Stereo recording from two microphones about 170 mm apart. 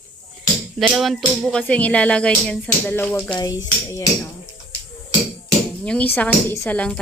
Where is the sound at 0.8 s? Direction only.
5° right (ahead or behind).